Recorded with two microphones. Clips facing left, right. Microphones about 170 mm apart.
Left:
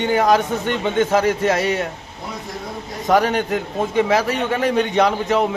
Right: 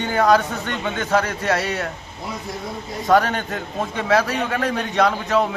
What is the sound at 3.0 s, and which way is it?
A man's voice, 20° left (ahead or behind).